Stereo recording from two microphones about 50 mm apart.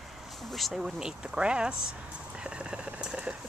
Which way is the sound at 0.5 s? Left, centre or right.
Centre.